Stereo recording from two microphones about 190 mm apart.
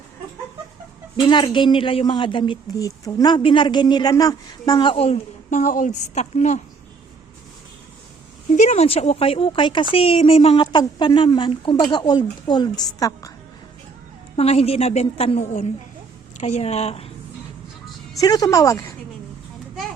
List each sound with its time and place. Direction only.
1.1 s speech: 25° left (ahead or behind)
8.5 s a woman's voice: 35° left (ahead or behind); by 13.3 s 20° left (ahead or behind)
14.3 s a woman's voice: 30° left (ahead or behind)
18.2 s speech: 20° left (ahead or behind)